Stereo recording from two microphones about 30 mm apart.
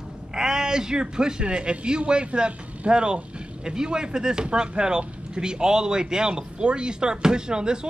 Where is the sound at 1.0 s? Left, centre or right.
Right.